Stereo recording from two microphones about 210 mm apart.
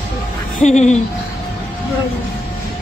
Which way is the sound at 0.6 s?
35° left (ahead or behind).